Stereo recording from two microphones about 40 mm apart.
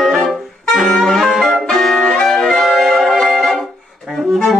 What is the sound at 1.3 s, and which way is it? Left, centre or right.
Music, centre.